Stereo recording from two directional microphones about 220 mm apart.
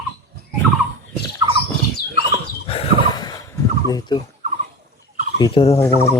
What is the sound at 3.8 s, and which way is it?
Speech, 20° left (ahead or behind).